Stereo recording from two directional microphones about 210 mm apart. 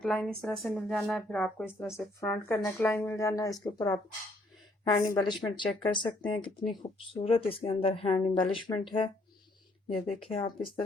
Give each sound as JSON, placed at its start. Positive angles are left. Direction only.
{"t": 0.0, "sound": "speech", "side_deg": 5}